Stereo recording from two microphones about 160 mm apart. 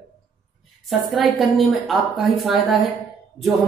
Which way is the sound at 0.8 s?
Centre (ahead or behind).